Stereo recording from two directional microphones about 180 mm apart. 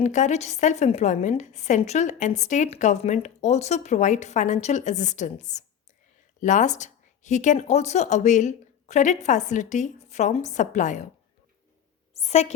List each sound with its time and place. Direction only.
0.0 s a woman's voice: 40° left (ahead or behind)
12.1 s a woman's voice: 35° left (ahead or behind)